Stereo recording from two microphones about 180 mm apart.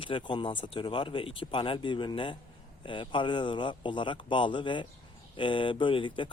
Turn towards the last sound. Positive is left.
turn(degrees=30)  # may be behind; listen again after turning